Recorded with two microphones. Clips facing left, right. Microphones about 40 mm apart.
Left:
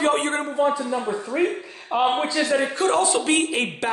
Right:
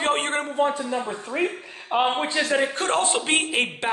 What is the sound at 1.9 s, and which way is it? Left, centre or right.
A man's voice, right.